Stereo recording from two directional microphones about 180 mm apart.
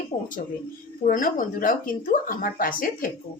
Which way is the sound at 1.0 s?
50° left (ahead or behind).